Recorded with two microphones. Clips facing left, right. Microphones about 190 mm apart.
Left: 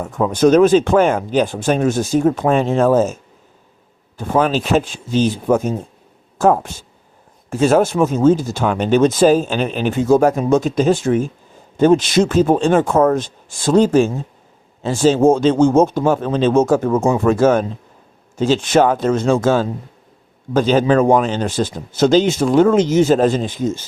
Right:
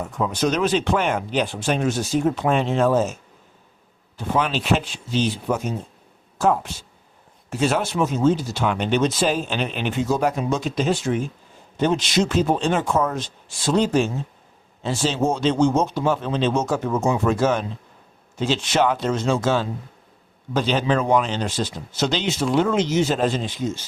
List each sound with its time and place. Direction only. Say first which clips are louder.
0.0 s speech: left 8 dB; 50° left (ahead or behind)
4.2 s speech: left 6 dB; 45° left (ahead or behind)